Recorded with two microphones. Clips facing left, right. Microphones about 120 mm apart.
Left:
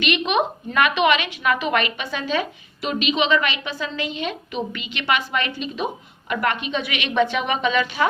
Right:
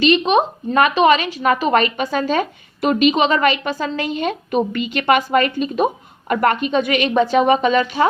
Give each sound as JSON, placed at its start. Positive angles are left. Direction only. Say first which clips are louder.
{"t": 0.0, "sound": "a woman's voice", "louder": "right 6 dB", "side_deg": -30}